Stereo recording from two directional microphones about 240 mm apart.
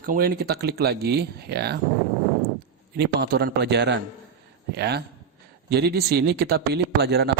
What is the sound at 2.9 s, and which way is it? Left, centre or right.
Speech, right.